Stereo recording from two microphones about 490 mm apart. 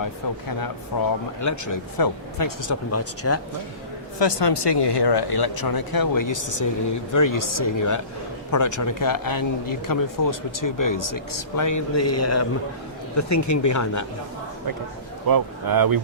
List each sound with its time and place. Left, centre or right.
0.9 s speech: left
4.2 s speech: left
15.3 s speech: right